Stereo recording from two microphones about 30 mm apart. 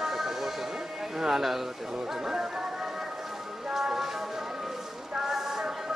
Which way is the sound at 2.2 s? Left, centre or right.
Centre.